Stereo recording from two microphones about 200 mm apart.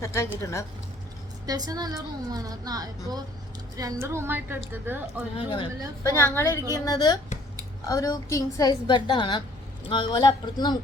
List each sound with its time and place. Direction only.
0.0 s a woman's voice: 15° left (ahead or behind)
1.5 s a woman's voice: 20° right (ahead or behind)
5.4 s speech: 25° left (ahead or behind)
6.0 s a woman's voice: 15° left (ahead or behind)